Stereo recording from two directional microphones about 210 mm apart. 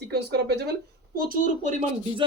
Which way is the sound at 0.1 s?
50° right (ahead or behind).